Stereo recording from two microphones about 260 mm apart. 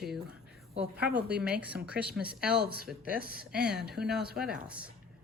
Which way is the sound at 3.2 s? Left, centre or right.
Right.